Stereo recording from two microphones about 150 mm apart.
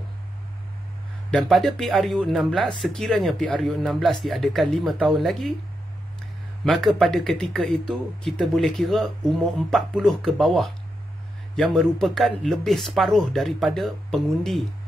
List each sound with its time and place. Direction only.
1.3 s a man's voice: 5° left (ahead or behind)
6.6 s a man's voice: centre (ahead or behind)